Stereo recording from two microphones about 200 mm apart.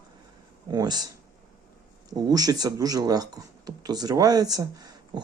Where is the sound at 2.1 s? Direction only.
20° right (ahead or behind).